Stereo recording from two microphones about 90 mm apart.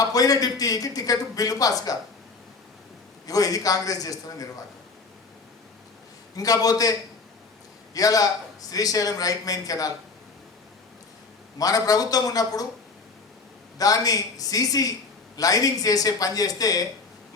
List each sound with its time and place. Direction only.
0.0 s a man's voice: 45° left (ahead or behind)
3.2 s a man's voice: 40° left (ahead or behind)
6.3 s a man's voice: 45° left (ahead or behind)
7.9 s a man's voice: 40° left (ahead or behind)
11.5 s a man's voice: 40° left (ahead or behind)
13.7 s a man's voice: 45° left (ahead or behind)